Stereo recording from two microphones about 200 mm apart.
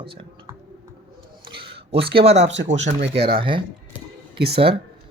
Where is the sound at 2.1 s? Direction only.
30° right (ahead or behind).